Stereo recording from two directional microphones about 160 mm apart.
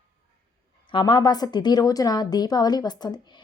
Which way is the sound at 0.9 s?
30° left (ahead or behind).